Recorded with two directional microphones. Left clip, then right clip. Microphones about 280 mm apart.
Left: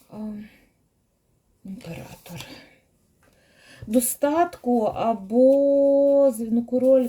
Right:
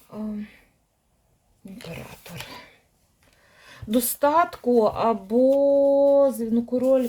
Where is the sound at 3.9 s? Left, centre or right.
Right.